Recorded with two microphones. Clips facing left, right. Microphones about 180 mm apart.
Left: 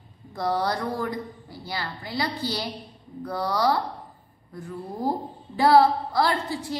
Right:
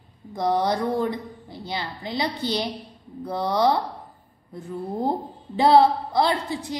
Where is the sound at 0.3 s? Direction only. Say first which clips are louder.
Right 3 dB; 20° right (ahead or behind).